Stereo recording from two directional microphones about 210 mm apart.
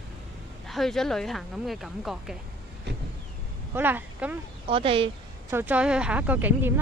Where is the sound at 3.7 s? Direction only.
10° right (ahead or behind).